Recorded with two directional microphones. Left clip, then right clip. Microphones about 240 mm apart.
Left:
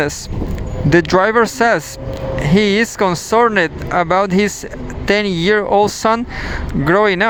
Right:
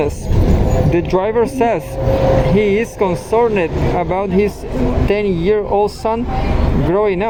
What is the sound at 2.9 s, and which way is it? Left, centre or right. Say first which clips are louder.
Speech: left 1 dB; left.